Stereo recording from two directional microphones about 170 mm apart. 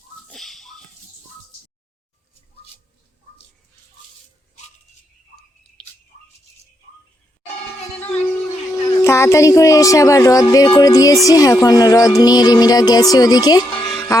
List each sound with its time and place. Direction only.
0.3 s a sound: centre (ahead or behind)
5.8 s whispering: 5° left (ahead or behind)
9.0 s speech: 15° left (ahead or behind)